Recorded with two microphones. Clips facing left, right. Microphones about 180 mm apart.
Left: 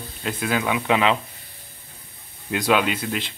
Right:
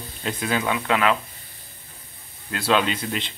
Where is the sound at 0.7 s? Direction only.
20° left (ahead or behind).